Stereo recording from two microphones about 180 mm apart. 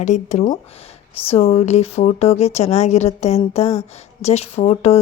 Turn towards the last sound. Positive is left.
turn(degrees=35)  # may be behind; listen again after turning